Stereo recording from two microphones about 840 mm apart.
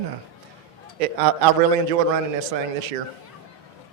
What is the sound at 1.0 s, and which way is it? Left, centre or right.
A man's voice, right.